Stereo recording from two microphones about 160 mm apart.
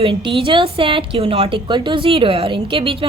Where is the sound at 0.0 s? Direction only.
30° right (ahead or behind).